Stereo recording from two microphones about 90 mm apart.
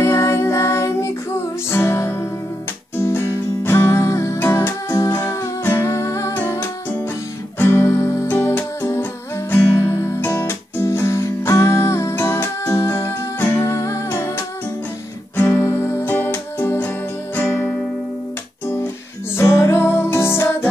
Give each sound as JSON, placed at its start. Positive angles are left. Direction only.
{"t": 0.0, "sound": "music", "side_deg": 30}
{"t": 7.5, "sound": "music", "side_deg": 25}
{"t": 10.4, "sound": "music", "side_deg": 30}
{"t": 15.3, "sound": "music", "side_deg": 25}
{"t": 19.3, "sound": "music", "side_deg": 30}